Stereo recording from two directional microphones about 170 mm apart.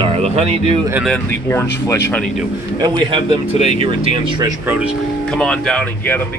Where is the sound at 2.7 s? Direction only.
25° right (ahead or behind).